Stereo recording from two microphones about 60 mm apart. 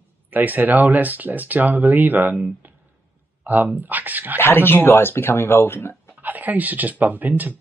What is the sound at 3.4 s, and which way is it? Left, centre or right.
Speech, right.